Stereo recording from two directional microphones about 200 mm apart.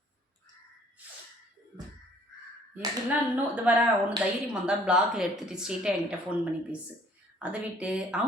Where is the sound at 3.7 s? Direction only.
5° right (ahead or behind).